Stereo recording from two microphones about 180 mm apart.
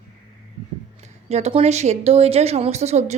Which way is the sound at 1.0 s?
35° right (ahead or behind).